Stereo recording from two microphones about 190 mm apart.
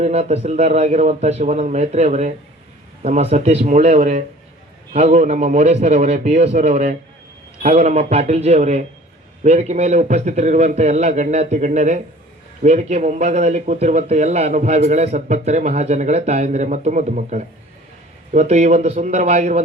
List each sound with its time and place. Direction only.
0.0 s a man's voice: 35° right (ahead or behind)